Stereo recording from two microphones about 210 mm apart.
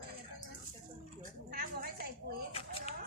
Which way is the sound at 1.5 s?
45° right (ahead or behind).